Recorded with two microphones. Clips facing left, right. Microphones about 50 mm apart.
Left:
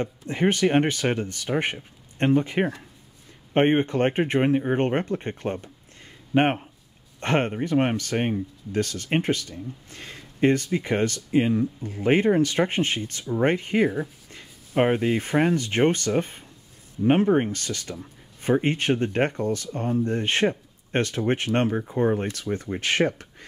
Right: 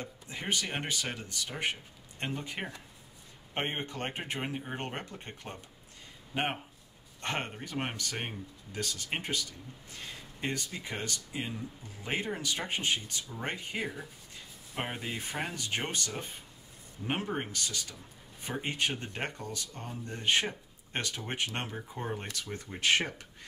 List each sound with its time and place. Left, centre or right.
0.0 s speech: left
8.7 s speech: left
17.0 s speech: left
17.5 s speech: left